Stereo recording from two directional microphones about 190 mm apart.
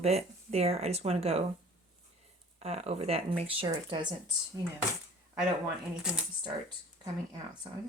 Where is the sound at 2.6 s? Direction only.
35° right (ahead or behind).